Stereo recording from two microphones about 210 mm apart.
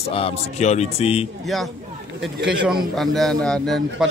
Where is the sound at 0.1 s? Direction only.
30° left (ahead or behind).